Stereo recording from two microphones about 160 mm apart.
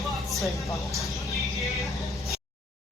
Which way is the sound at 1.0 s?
Centre (ahead or behind).